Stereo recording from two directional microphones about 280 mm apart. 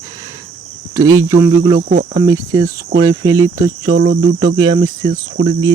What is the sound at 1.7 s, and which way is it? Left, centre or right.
Cricket, right.